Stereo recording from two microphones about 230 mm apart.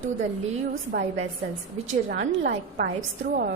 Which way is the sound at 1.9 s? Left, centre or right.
Right.